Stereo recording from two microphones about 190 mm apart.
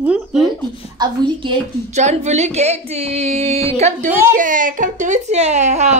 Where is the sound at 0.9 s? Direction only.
25° right (ahead or behind).